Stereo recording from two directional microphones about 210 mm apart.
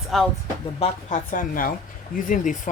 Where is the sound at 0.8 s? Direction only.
35° left (ahead or behind).